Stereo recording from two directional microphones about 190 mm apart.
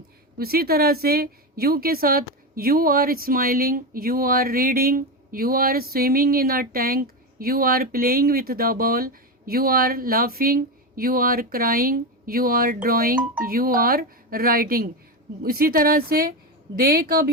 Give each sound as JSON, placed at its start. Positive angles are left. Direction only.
{"t": 0.3, "sound": "a woman's voice", "side_deg": -55}